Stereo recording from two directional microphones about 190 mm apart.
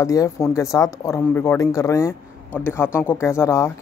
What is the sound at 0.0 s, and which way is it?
A man's voice, 15° left (ahead or behind).